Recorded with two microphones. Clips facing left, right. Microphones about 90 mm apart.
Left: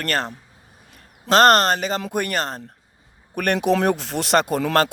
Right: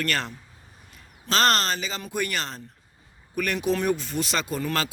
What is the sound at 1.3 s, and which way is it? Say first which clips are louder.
Speech: left 8 dB; 55° left (ahead or behind).